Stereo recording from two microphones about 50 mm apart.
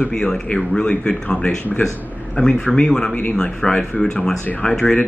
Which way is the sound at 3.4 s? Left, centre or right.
Centre.